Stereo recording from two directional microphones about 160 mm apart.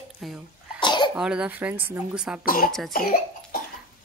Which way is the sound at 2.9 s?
65° left (ahead or behind).